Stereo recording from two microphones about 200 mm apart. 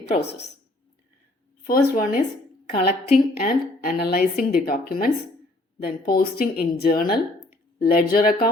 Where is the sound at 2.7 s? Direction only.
45° left (ahead or behind).